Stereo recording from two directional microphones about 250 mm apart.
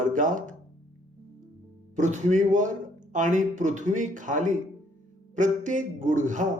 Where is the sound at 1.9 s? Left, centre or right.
Right.